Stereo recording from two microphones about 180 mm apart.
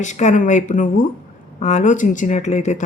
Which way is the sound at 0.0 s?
40° left (ahead or behind).